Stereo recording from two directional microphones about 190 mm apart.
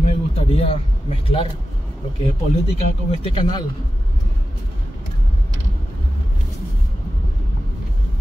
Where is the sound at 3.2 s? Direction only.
25° left (ahead or behind).